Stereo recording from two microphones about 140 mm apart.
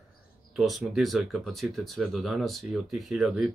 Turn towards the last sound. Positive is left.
turn(degrees=-5)  # may be behind; listen again after turning